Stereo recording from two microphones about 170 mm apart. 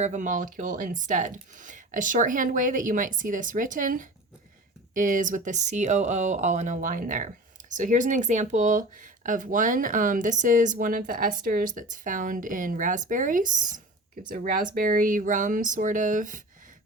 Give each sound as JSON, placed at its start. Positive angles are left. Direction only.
{"t": 0.0, "sound": "speech", "side_deg": -45}